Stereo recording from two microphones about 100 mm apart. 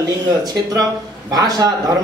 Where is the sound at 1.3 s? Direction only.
40° right (ahead or behind).